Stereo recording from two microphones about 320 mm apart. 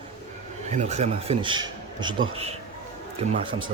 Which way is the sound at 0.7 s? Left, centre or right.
Right.